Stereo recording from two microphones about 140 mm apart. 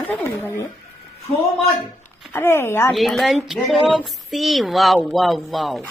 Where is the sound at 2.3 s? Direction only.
15° left (ahead or behind).